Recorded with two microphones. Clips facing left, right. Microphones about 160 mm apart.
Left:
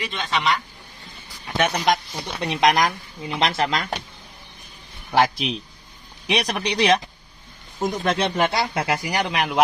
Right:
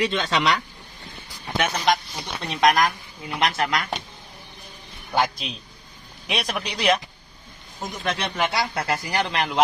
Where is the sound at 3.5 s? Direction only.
25° left (ahead or behind).